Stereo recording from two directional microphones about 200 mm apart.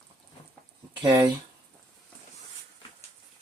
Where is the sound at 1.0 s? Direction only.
20° right (ahead or behind).